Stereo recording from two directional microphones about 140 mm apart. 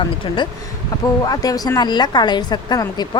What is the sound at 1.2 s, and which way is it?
Speech, 25° left (ahead or behind).